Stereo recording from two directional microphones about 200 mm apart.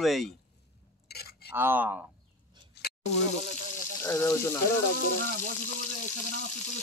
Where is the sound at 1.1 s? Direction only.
50° left (ahead or behind).